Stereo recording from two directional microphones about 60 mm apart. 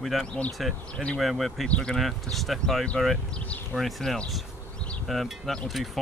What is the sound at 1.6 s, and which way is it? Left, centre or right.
Speech, centre.